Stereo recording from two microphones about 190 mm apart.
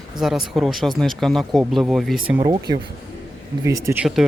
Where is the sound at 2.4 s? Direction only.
20° right (ahead or behind).